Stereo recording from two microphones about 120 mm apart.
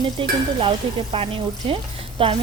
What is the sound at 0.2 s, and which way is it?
Speech, 45° right (ahead or behind).